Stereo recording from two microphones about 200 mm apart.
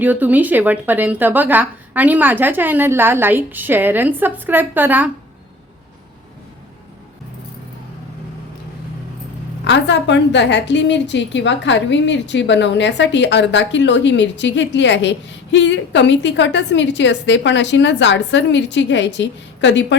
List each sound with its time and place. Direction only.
0.0 s a woman's voice: 10° right (ahead or behind)
9.6 s a woman's voice: 60° left (ahead or behind)